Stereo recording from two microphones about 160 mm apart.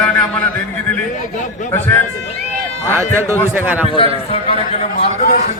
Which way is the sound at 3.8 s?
35° left (ahead or behind).